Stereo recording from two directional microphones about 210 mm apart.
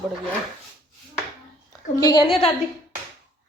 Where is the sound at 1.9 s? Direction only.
20° left (ahead or behind).